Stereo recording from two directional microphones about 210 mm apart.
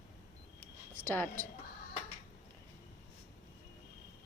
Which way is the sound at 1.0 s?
10° left (ahead or behind).